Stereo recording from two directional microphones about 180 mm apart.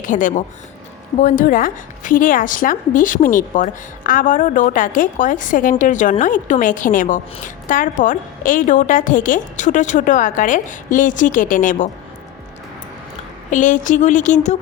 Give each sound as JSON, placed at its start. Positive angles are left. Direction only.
{"t": 0.0, "sound": "a woman's voice", "side_deg": 45}
{"t": 13.5, "sound": "a woman's voice", "side_deg": 45}